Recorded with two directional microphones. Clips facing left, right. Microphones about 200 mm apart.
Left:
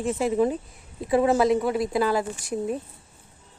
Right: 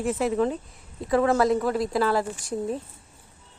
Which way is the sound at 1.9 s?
20° left (ahead or behind).